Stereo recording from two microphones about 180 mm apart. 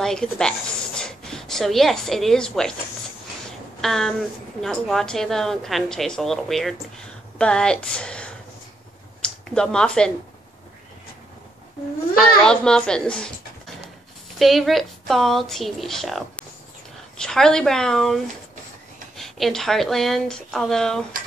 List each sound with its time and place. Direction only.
0.0 s a woman's voice: 5° left (ahead or behind)
3.8 s a woman's voice: centre (ahead or behind)
12.2 s a woman's voice: 5° left (ahead or behind)
14.4 s a woman's voice: centre (ahead or behind)